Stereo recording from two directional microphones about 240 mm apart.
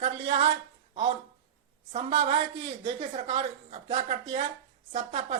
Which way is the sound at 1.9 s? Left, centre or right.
Right.